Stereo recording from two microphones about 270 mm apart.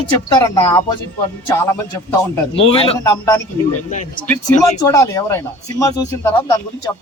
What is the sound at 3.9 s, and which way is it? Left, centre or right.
Speech, left.